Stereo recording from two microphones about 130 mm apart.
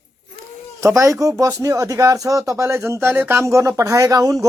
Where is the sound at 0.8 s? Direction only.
25° right (ahead or behind).